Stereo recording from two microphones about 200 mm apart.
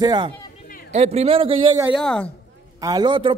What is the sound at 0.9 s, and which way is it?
Speech, 30° right (ahead or behind).